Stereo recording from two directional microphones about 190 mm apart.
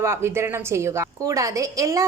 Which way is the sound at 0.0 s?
15° right (ahead or behind).